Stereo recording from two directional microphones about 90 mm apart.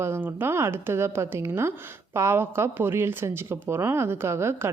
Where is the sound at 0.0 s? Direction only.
25° right (ahead or behind).